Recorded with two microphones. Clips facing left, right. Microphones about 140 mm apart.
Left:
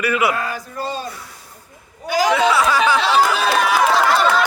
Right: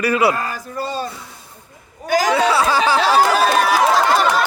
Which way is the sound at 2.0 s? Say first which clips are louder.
Right 1 dB; 45° right (ahead or behind).